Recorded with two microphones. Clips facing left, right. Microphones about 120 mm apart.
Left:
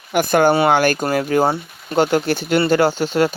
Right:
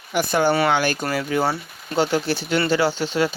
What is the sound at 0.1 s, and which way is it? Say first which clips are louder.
Speech: left 5 dB; 50° left (ahead or behind).